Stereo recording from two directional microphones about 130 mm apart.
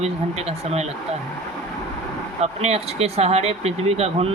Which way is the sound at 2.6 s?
55° right (ahead or behind).